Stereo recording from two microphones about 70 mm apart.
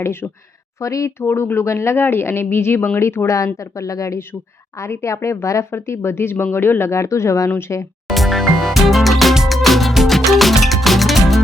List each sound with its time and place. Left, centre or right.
0.0 s speech: left
0.8 s a woman's voice: left
1.3 s speech: left
3.2 s a woman's voice: left
8.0 s music: centre